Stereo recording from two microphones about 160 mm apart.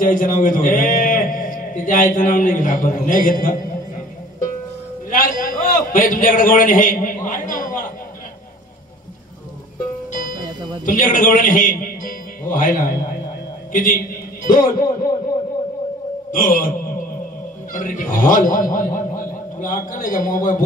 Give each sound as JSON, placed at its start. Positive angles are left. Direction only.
{"t": 0.0, "sound": "a man's voice", "side_deg": 55}
{"t": 5.1, "sound": "a man's voice", "side_deg": 60}
{"t": 10.1, "sound": "music", "side_deg": 60}
{"t": 10.9, "sound": "a man's voice", "side_deg": 60}
{"t": 16.3, "sound": "speech", "side_deg": 60}
{"t": 17.7, "sound": "speech", "side_deg": 55}